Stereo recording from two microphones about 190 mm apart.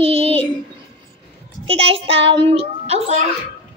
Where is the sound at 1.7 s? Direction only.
30° right (ahead or behind).